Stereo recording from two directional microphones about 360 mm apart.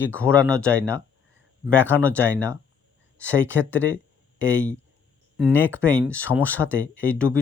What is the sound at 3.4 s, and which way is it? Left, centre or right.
Speech, left.